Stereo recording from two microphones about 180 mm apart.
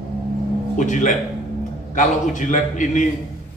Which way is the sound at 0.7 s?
45° left (ahead or behind).